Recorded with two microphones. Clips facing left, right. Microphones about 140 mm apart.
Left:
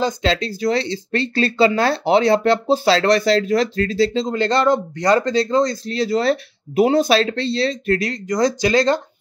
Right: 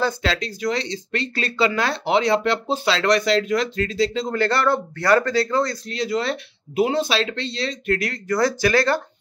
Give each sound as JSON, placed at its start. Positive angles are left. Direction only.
{"t": 0.0, "sound": "speech", "side_deg": 25}
{"t": 5.9, "sound": "speech", "side_deg": 35}
{"t": 8.0, "sound": "speech", "side_deg": 20}